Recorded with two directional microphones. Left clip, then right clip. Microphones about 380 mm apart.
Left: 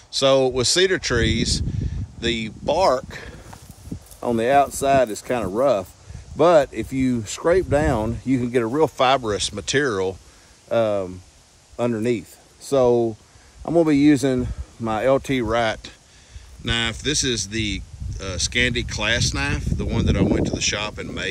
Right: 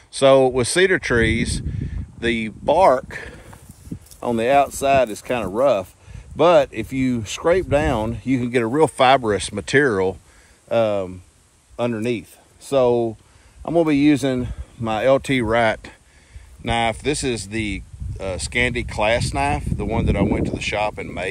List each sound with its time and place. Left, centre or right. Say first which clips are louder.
0.1 s speech: right 3 dB; centre